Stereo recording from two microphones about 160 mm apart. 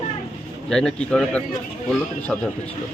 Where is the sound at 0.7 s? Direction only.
5° left (ahead or behind).